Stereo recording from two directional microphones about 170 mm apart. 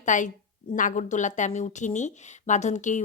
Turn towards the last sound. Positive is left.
turn(degrees=45)  # may be behind; listen again after turning